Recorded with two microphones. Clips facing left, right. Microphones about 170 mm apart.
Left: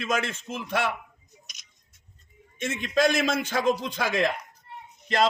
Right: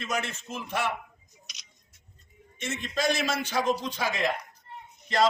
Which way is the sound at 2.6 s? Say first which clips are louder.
Left 6 dB; 50° left (ahead or behind).